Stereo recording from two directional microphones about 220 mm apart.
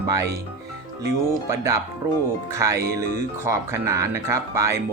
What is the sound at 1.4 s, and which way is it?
Speech, 15° right (ahead or behind).